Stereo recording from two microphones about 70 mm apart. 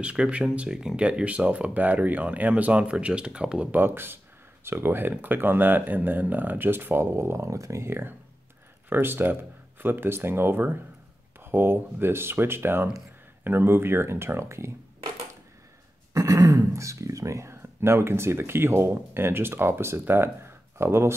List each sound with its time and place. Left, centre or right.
0.0 s speech: centre
3.7 s speech: right
16.1 s speech: right